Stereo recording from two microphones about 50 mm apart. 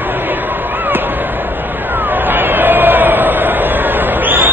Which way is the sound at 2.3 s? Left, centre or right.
Right.